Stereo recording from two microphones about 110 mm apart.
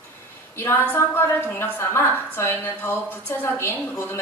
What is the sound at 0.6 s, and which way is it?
A woman's voice, 20° left (ahead or behind).